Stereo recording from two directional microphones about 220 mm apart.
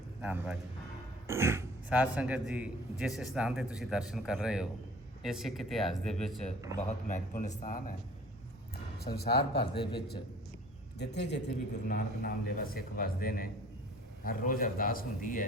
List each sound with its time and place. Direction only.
0.2 s a man's voice: 5° right (ahead or behind)
6.8 s a man's voice: 35° left (ahead or behind)
9.7 s a man's voice: 20° left (ahead or behind)
10.9 s a man's voice: 50° left (ahead or behind)